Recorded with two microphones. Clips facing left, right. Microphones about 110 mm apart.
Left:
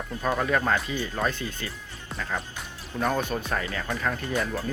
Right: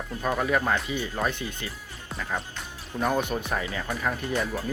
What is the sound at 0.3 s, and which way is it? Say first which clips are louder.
Speech: even; 10° right (ahead or behind).